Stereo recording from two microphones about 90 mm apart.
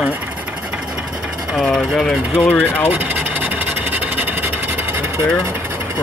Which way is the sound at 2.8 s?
20° right (ahead or behind).